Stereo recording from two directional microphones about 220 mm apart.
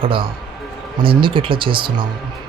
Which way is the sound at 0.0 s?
25° right (ahead or behind).